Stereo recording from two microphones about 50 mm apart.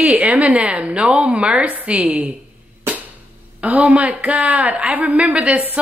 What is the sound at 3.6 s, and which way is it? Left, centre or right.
A woman's voice, right.